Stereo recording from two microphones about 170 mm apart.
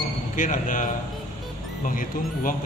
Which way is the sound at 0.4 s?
50° left (ahead or behind).